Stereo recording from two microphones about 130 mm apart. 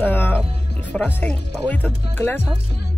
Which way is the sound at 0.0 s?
15° left (ahead or behind).